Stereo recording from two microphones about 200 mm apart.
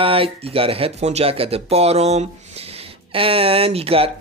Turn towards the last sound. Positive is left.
turn(degrees=-30)  # may be behind; listen again after turning